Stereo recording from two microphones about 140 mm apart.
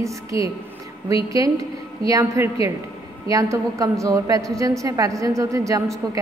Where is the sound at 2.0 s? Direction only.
20° right (ahead or behind).